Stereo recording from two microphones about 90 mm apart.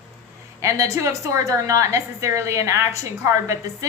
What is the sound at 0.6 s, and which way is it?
A woman's voice, 35° right (ahead or behind).